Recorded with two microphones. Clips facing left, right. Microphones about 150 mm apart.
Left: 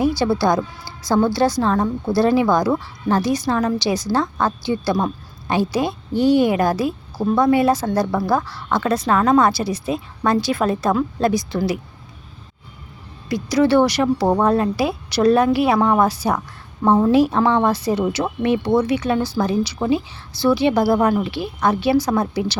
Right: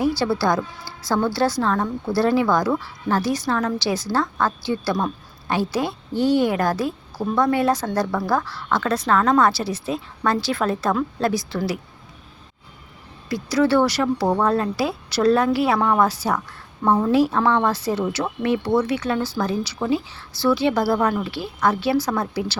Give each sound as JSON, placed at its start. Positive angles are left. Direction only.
{"t": 0.0, "sound": "a woman's voice", "side_deg": 15}
{"t": 13.2, "sound": "a woman's voice", "side_deg": 15}